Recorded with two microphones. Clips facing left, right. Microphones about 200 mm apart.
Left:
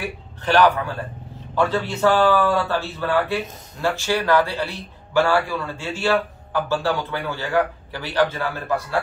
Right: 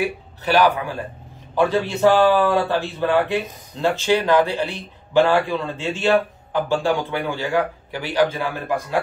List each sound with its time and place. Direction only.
0.5 s speech: 10° right (ahead or behind)